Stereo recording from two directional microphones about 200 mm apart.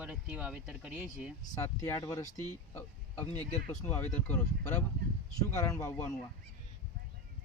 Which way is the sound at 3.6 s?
10° left (ahead or behind).